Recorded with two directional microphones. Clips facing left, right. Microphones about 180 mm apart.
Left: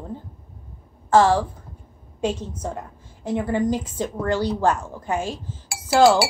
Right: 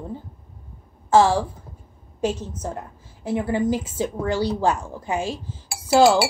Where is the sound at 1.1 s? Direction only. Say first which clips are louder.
Even; 10° right (ahead or behind).